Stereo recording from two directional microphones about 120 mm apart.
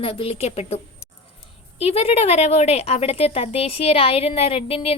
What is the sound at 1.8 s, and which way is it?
A woman's voice, 60° left (ahead or behind).